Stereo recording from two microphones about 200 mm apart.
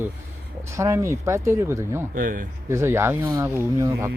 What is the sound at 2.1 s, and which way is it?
Speech, 45° right (ahead or behind).